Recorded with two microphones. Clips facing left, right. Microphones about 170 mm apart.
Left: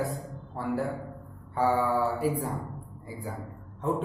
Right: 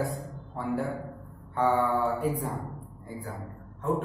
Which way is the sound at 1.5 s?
5° left (ahead or behind).